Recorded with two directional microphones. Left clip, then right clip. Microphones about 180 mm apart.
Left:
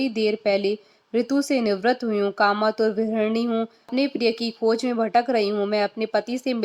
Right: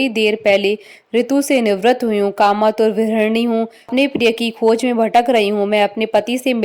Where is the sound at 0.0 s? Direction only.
30° right (ahead or behind).